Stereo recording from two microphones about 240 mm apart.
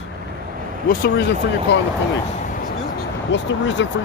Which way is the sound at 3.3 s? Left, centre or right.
Left.